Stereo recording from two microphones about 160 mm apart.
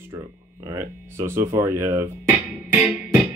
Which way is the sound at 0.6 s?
15° right (ahead or behind).